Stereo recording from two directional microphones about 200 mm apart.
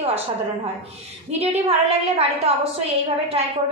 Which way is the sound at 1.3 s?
30° right (ahead or behind).